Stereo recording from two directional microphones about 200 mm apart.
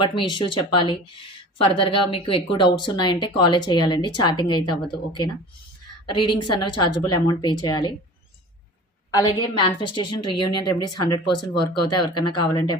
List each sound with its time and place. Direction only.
0.0 s a woman's voice: 25° left (ahead or behind)
9.1 s a woman's voice: 20° left (ahead or behind)